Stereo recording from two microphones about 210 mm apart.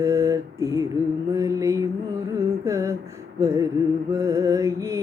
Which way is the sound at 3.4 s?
15° right (ahead or behind).